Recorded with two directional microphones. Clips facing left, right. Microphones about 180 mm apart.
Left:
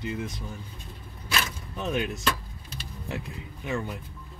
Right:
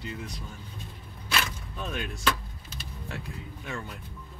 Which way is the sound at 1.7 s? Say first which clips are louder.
Left 7 dB; 20° left (ahead or behind).